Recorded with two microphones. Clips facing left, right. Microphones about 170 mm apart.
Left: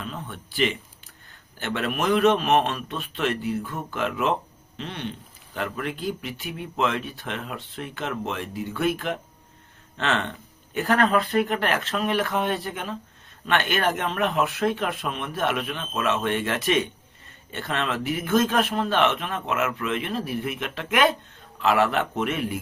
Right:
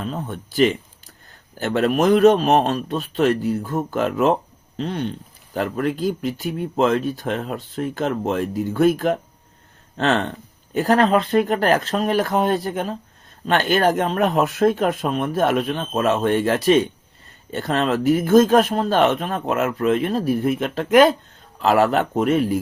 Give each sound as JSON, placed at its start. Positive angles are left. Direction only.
{"t": 0.0, "sound": "speech", "side_deg": -40}